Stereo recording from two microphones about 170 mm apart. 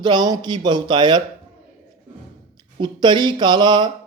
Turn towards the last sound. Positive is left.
turn(degrees=-25)  # may be behind; listen again after turning